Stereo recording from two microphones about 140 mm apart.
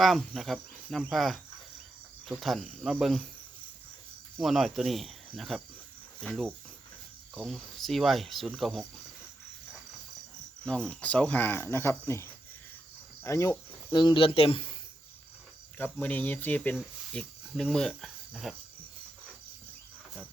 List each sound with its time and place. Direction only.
0.0 s speech: centre (ahead or behind)
2.4 s speech: centre (ahead or behind)
4.4 s speech: centre (ahead or behind)
10.7 s speech: 5° left (ahead or behind)
13.2 s cricket: 20° left (ahead or behind)
13.9 s speech: 35° left (ahead or behind)
15.8 s speech: 10° left (ahead or behind)